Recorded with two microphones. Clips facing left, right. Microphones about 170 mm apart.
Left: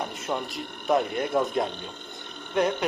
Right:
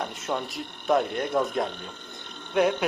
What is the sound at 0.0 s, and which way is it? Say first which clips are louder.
Speech: even; centre (ahead or behind).